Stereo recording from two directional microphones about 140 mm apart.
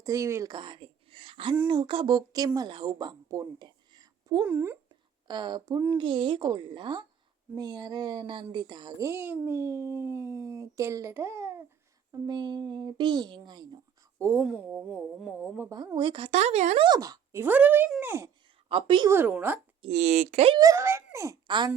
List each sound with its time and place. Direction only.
0.0 s a child's voice: 25° right (ahead or behind)
0.5 s a woman's voice: 35° right (ahead or behind)
4.4 s speech: 15° right (ahead or behind)
5.3 s a woman's voice: 30° right (ahead or behind)
14.2 s speech: 20° right (ahead or behind)
16.0 s a woman's voice: 35° right (ahead or behind)
16.3 s speech: 55° right (ahead or behind)
16.8 s speech: 30° right (ahead or behind)
17.4 s speech: 10° right (ahead or behind)
18.7 s a woman's voice: 40° right (ahead or behind)
19.0 s speech: 15° right (ahead or behind)
19.9 s speech: 55° right (ahead or behind)
20.6 s a child's voice: 25° right (ahead or behind)
21.4 s speech: 35° right (ahead or behind)